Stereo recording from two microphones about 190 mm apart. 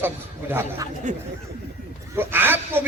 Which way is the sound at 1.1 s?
40° right (ahead or behind).